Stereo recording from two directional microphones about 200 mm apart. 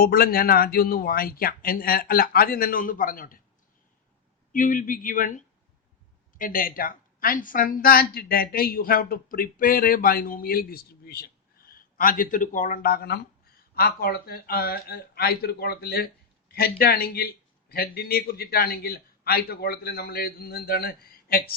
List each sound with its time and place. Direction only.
0.0 s speech: 45° left (ahead or behind)
4.5 s a man's voice: 40° left (ahead or behind)